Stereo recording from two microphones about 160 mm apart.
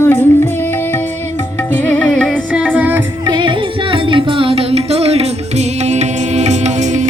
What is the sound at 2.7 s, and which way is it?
Music, 10° right (ahead or behind).